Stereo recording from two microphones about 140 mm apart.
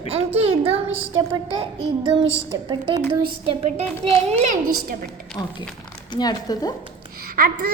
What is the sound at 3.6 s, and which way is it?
Speech, 50° right (ahead or behind).